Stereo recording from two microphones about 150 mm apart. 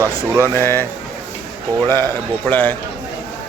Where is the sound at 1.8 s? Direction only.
15° left (ahead or behind).